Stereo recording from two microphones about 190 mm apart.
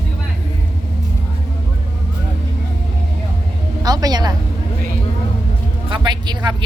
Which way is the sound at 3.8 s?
20° right (ahead or behind).